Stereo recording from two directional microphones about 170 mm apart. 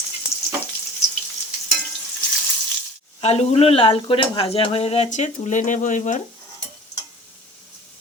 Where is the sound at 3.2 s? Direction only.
40° left (ahead or behind).